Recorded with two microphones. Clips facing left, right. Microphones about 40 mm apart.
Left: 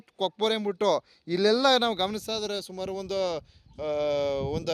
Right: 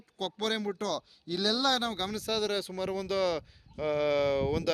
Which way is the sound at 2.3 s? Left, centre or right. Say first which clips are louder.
Right 1 dB; centre.